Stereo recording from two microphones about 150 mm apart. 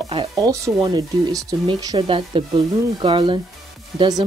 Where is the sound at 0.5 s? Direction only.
25° right (ahead or behind).